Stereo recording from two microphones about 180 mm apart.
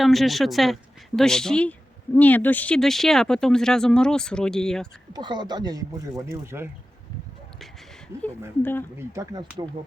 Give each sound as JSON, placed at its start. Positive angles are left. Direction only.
{"t": 0.0, "sound": "speech", "side_deg": 0}
{"t": 5.1, "sound": "speech", "side_deg": -25}
{"t": 9.0, "sound": "speech", "side_deg": -20}